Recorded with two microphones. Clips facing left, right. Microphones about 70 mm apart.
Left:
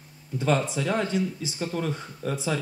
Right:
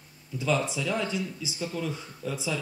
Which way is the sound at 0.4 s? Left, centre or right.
Left.